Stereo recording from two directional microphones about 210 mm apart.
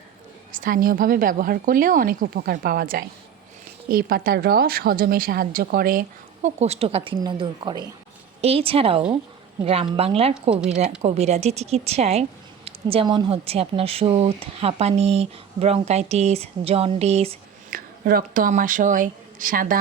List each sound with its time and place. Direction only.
0.5 s a woman's voice: 40° right (ahead or behind)
10.5 s speech: 5° right (ahead or behind)
11.0 s a woman's voice: 30° right (ahead or behind)
17.7 s speech: 45° right (ahead or behind)